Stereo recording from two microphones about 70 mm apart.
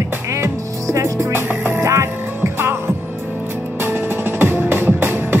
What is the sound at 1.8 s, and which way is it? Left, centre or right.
Music, right.